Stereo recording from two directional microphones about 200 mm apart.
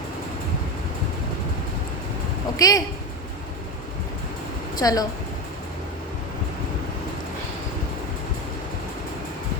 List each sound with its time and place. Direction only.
2.6 s speech: 20° left (ahead or behind)
4.8 s speech: 20° left (ahead or behind)